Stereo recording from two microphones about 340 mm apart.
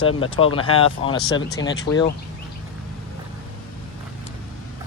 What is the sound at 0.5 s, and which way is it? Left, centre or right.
Speech, centre.